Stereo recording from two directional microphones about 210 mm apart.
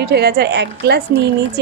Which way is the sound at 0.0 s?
50° right (ahead or behind).